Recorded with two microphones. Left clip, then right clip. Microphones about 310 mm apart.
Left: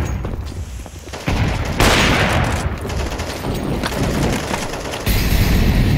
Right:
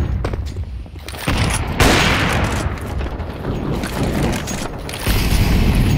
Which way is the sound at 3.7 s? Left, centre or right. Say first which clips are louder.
Left 1 dB; centre.